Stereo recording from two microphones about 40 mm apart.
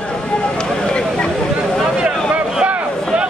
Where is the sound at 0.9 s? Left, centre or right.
Left.